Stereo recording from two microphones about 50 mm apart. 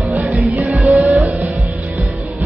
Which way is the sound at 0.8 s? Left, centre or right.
Centre.